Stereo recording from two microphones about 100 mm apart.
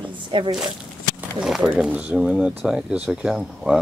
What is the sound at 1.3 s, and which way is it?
Speech, 5° right (ahead or behind).